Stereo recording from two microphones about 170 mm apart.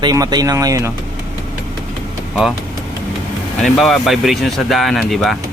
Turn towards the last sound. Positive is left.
turn(degrees=0)  # may be behind; listen again after turning